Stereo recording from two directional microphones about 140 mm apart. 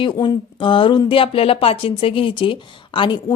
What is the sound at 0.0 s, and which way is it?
Speech, 35° left (ahead or behind).